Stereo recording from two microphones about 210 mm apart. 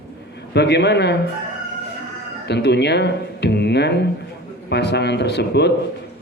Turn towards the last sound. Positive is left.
turn(degrees=55)  # may be behind; listen again after turning